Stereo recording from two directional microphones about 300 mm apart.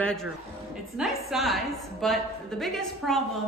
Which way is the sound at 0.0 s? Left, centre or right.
Centre.